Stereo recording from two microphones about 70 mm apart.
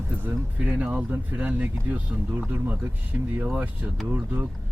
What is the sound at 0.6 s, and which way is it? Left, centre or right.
Speech, centre.